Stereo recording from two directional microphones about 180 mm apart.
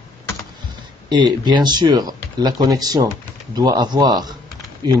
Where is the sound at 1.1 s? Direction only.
25° right (ahead or behind).